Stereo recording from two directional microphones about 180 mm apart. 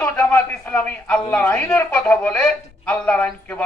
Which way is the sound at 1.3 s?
5° left (ahead or behind).